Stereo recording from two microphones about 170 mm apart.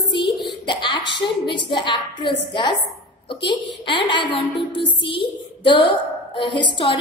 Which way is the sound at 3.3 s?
30° left (ahead or behind).